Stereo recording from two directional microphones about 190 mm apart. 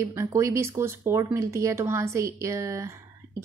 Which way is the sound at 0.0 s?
15° right (ahead or behind).